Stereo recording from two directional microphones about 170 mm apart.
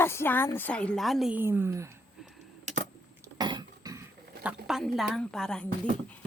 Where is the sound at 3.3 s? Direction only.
25° right (ahead or behind).